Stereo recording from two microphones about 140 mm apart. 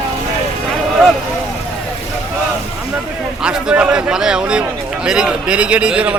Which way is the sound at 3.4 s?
5° right (ahead or behind).